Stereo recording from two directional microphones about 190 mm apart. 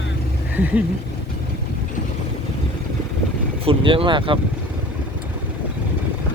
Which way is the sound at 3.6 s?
30° right (ahead or behind).